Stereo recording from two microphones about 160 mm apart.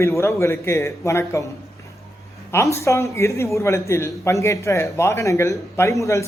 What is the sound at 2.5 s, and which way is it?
A man's voice, 20° left (ahead or behind).